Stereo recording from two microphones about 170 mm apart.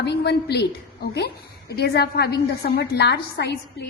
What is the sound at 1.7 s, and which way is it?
A woman's voice, 70° left (ahead or behind).